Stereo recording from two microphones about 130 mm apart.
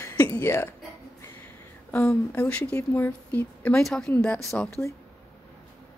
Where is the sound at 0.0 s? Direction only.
20° left (ahead or behind).